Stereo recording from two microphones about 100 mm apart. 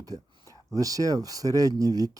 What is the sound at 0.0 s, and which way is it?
Speech, 35° right (ahead or behind).